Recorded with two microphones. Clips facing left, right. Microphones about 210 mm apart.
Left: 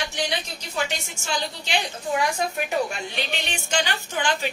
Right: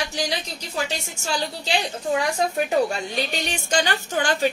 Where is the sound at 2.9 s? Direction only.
40° right (ahead or behind).